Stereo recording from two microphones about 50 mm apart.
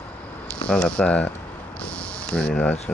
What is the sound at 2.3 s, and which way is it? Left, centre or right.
Speech, left.